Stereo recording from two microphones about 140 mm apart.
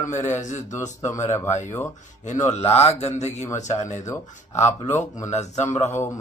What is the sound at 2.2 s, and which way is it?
Speech, 60° left (ahead or behind).